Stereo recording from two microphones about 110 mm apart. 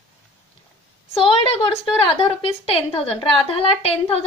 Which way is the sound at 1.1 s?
60° left (ahead or behind).